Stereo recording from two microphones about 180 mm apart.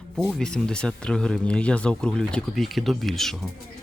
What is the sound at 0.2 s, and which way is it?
Speech, centre (ahead or behind).